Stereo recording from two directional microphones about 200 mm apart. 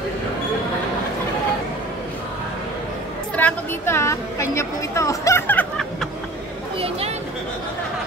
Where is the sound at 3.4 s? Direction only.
10° left (ahead or behind).